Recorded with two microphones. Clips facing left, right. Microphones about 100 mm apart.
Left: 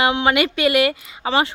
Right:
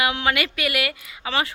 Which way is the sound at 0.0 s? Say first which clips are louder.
Left 5 dB; 25° left (ahead or behind).